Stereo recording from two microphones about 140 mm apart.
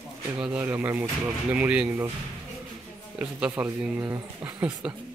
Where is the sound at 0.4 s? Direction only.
10° right (ahead or behind).